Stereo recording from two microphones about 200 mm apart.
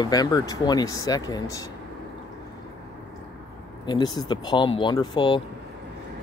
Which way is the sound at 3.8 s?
20° left (ahead or behind).